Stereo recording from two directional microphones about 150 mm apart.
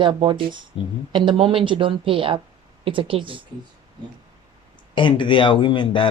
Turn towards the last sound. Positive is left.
turn(degrees=30)  # may be behind; listen again after turning